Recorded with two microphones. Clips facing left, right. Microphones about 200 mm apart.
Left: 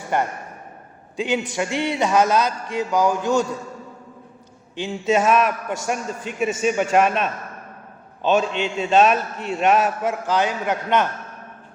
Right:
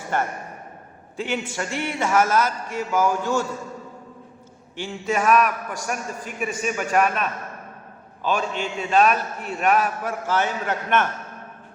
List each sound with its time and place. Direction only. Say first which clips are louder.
0.1 s a man's voice: left 3 dB; 15° left (ahead or behind)
4.8 s a man's voice: left 5 dB; 20° left (ahead or behind)